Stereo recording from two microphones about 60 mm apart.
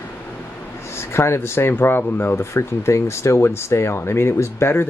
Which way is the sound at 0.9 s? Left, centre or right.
Left.